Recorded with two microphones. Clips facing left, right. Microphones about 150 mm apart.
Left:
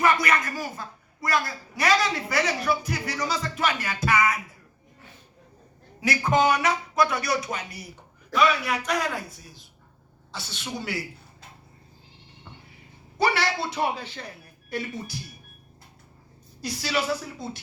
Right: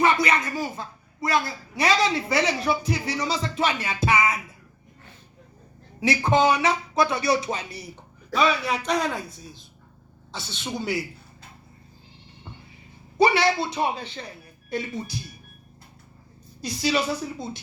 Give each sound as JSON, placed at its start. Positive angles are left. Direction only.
{"t": 0.0, "sound": "a woman's voice", "side_deg": -25}
{"t": 6.0, "sound": "a woman's voice", "side_deg": -25}
{"t": 10.6, "sound": "a woman's voice", "side_deg": -20}
{"t": 13.1, "sound": "a woman's voice", "side_deg": -20}
{"t": 16.6, "sound": "a woman's voice", "side_deg": -20}